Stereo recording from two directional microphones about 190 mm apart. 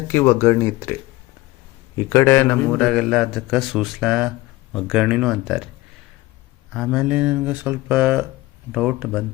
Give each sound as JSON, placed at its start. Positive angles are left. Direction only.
{"t": 0.1, "sound": "speech", "side_deg": 10}
{"t": 2.0, "sound": "a man's voice", "side_deg": 15}
{"t": 6.7, "sound": "a man's voice", "side_deg": 0}